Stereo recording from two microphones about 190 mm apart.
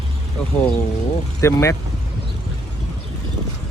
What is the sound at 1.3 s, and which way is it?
Speech, 15° left (ahead or behind).